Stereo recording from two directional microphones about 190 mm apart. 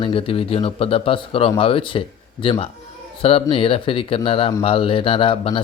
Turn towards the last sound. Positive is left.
turn(degrees=30)  # may be behind; listen again after turning